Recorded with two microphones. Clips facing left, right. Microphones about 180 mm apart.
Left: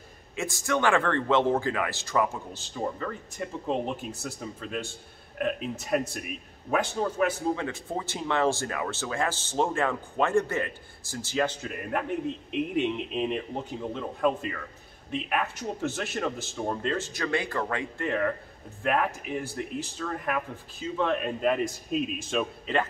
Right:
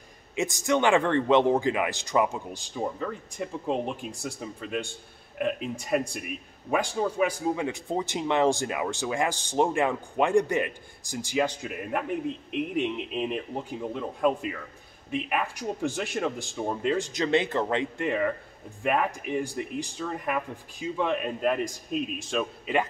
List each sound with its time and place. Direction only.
0.4 s a man's voice: 20° right (ahead or behind)
16.0 s a man's voice: centre (ahead or behind)